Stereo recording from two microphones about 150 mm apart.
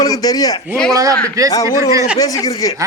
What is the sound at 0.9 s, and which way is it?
A woman's voice, 25° right (ahead or behind).